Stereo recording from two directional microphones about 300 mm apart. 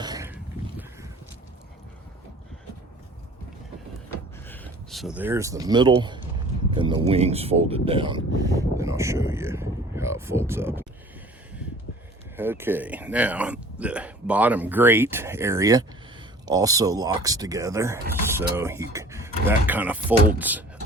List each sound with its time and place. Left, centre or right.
0.0 s a sound: centre
4.4 s speech: centre
12.4 s speech: centre
16.5 s mechanisms: centre
18.5 s speech: centre